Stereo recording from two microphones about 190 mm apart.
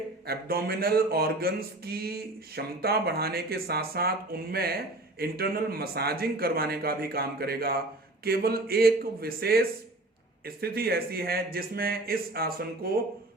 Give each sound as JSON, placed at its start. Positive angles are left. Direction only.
{"t": 0.3, "sound": "speech", "side_deg": -55}